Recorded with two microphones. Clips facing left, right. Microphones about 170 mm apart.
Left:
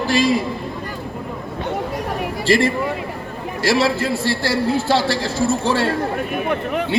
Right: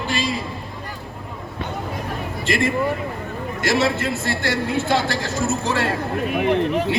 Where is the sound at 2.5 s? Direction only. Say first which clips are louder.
Left 3 dB; 30° left (ahead or behind).